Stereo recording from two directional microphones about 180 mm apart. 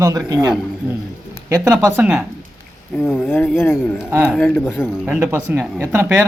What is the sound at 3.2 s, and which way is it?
Speech, 10° left (ahead or behind).